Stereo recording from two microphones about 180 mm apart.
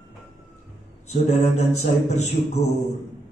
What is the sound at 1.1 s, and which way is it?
A man's voice, 40° left (ahead or behind).